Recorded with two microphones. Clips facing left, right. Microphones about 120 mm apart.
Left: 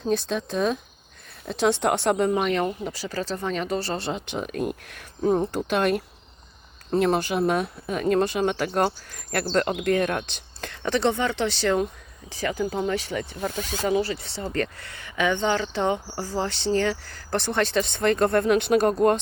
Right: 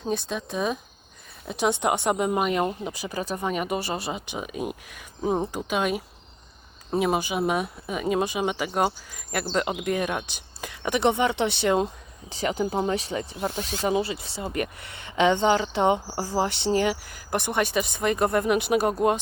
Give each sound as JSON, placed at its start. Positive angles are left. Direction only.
{"t": 0.0, "sound": "speech", "side_deg": 0}
{"t": 5.2, "sound": "speech", "side_deg": -15}
{"t": 5.5, "sound": "speech", "side_deg": -5}